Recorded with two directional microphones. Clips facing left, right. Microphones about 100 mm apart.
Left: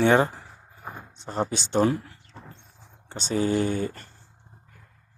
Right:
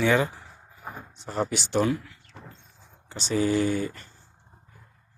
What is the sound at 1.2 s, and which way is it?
Speech, 30° left (ahead or behind).